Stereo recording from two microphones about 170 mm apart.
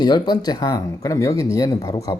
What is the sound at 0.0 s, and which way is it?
Speech, 25° left (ahead or behind).